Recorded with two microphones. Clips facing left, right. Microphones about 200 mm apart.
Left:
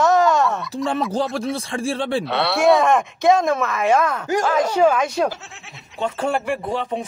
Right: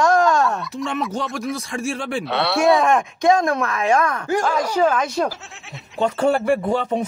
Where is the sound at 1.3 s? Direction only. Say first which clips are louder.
Left 2 dB; 30° left (ahead or behind).